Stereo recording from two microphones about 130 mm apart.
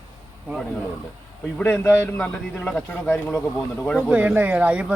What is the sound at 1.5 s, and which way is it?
Speech, 15° left (ahead or behind).